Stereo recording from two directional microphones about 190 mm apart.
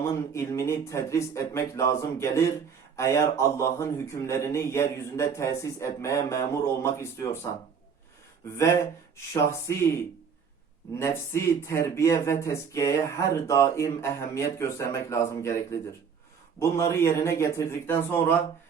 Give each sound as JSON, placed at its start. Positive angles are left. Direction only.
{"t": 0.0, "sound": "speech", "side_deg": 15}
{"t": 9.1, "sound": "speech", "side_deg": 15}
{"t": 11.0, "sound": "speech", "side_deg": 15}